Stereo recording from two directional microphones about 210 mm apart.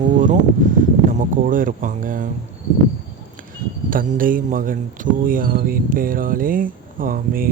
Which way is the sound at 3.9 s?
40° right (ahead or behind).